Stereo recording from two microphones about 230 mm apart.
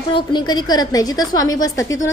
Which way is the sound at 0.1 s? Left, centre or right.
Centre.